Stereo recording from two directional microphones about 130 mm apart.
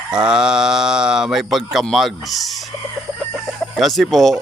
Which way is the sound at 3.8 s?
Centre (ahead or behind).